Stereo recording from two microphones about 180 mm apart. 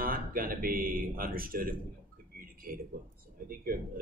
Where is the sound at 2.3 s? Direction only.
50° right (ahead or behind).